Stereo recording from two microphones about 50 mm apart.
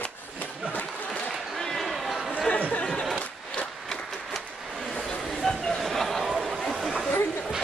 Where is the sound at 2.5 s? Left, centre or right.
Left.